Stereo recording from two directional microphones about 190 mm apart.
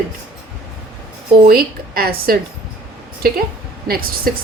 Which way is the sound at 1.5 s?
55° right (ahead or behind).